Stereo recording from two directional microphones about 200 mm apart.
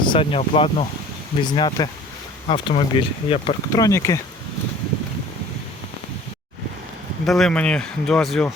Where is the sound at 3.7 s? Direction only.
15° left (ahead or behind).